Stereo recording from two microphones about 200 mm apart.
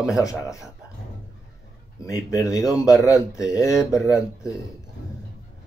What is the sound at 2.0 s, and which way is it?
Speech, 15° left (ahead or behind).